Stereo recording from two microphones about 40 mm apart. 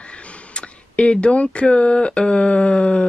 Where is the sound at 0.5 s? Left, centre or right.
Left.